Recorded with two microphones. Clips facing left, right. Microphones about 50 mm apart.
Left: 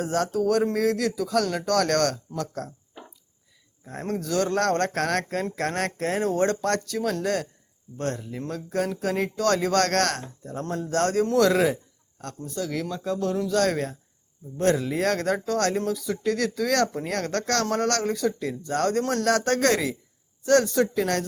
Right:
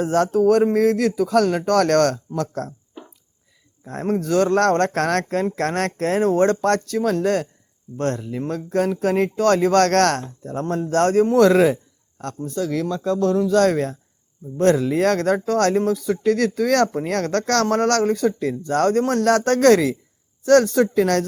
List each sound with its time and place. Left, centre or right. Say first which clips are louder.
0.0 s a man's voice: right 7 dB; right
3.8 s a man's voice: right 7 dB; right
10.6 s a man's voice: right 6 dB; right
12.9 s speech: right 9 dB; right